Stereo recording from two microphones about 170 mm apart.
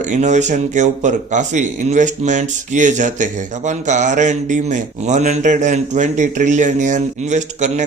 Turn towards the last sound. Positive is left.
turn(degrees=-45)  # may be behind; listen again after turning